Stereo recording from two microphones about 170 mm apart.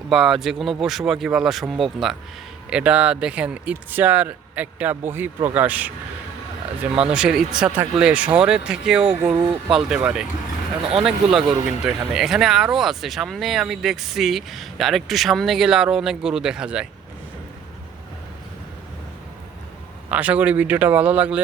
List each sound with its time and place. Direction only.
0.1 s speech: centre (ahead or behind)
6.9 s speech: 5° right (ahead or behind)
9.3 s speech: 30° right (ahead or behind)
9.7 s speech: 5° right (ahead or behind)
20.1 s speech: 10° right (ahead or behind)